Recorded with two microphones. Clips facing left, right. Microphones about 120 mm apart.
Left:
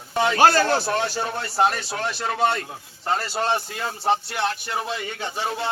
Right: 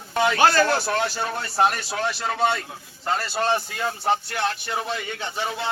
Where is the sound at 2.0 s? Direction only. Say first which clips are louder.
Right 1 dB; 5° right (ahead or behind).